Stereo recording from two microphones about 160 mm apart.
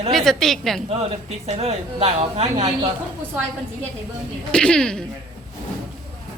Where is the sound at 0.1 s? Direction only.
Centre (ahead or behind).